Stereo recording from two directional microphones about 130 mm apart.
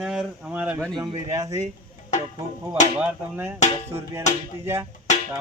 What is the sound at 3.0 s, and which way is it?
Speech, 15° right (ahead or behind).